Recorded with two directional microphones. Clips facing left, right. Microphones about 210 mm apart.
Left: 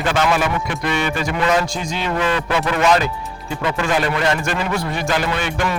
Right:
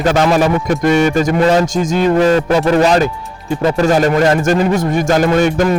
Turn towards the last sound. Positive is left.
turn(degrees=-40)  # may be behind; listen again after turning